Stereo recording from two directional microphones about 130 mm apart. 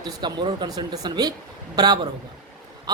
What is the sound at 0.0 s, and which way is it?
A man's voice, 35° right (ahead or behind).